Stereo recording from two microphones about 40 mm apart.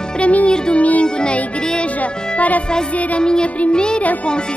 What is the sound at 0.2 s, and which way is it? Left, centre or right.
Speech, left.